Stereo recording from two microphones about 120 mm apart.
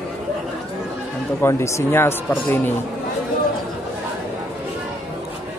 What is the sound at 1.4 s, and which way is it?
Speech, 25° left (ahead or behind).